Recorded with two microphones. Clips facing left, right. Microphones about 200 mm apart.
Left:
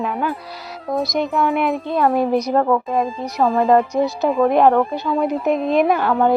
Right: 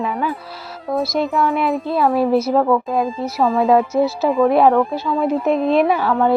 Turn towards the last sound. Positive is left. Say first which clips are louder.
# even
turn(degrees=0)  # may be behind; listen again after turning